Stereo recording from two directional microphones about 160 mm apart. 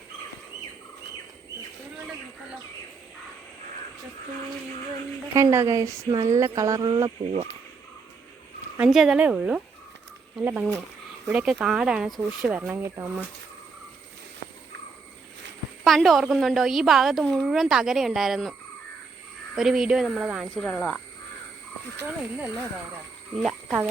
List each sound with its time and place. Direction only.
5.3 s speech: 15° right (ahead or behind)
8.8 s a woman's voice: centre (ahead or behind)
15.8 s a woman's voice: centre (ahead or behind)
19.5 s a woman's voice: 5° right (ahead or behind)
20.6 s a woman's voice: 5° left (ahead or behind)
21.9 s speech: 15° right (ahead or behind)
23.4 s frog: centre (ahead or behind)